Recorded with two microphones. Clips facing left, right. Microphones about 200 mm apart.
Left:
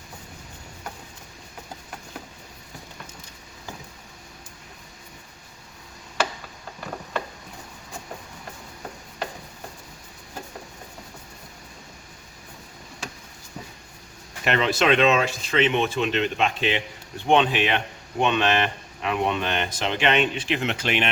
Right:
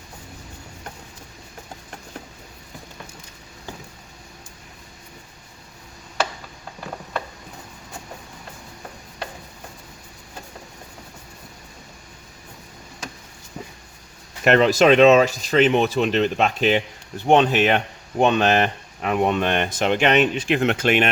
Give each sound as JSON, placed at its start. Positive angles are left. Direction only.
{"t": 14.4, "sound": "speech", "side_deg": -45}